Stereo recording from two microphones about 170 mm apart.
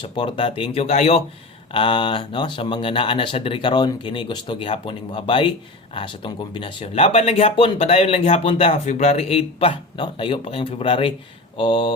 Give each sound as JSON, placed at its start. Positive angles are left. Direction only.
{"t": 0.0, "sound": "speech", "side_deg": 30}